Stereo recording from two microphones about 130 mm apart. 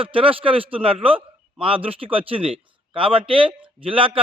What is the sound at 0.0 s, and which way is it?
A man's voice, 45° right (ahead or behind).